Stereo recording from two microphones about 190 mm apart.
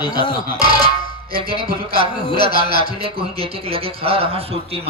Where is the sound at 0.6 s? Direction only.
30° right (ahead or behind).